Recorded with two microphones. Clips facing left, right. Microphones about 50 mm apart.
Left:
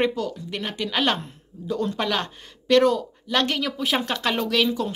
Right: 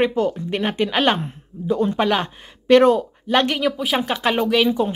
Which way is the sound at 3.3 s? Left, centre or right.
Centre.